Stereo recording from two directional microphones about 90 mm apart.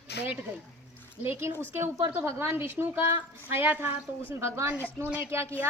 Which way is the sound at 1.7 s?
30° right (ahead or behind).